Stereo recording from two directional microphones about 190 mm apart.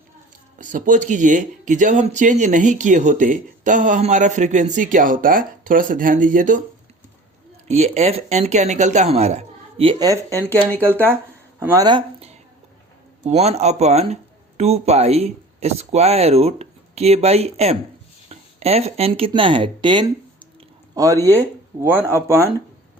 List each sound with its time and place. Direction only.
0.6 s speech: 40° right (ahead or behind)
7.7 s speech: 35° right (ahead or behind); by 10.4 s 15° right (ahead or behind)
11.6 s speech: 15° right (ahead or behind)